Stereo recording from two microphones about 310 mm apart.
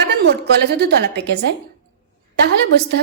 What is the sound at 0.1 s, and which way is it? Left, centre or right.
A woman's voice, right.